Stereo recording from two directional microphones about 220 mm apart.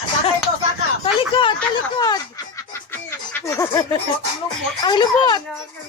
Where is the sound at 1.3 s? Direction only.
20° left (ahead or behind).